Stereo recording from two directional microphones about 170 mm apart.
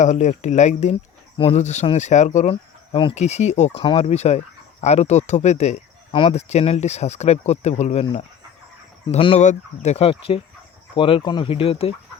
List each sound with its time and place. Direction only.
0.0 s speech: 45° left (ahead or behind)
2.5 s speech: 30° left (ahead or behind)
3.8 s speech: 30° left (ahead or behind)
9.0 s speech: 35° left (ahead or behind)